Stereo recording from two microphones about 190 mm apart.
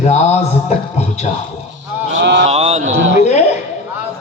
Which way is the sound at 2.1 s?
75° right (ahead or behind).